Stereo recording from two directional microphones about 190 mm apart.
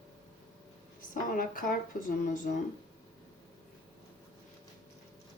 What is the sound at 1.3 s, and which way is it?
Speech, 45° left (ahead or behind).